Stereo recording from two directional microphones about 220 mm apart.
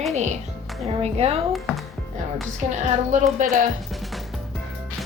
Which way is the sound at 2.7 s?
35° right (ahead or behind).